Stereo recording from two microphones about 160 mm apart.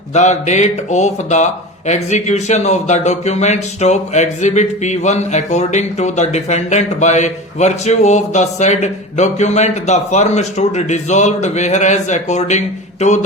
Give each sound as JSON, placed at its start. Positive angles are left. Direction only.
{"t": 0.1, "sound": "speech", "side_deg": 45}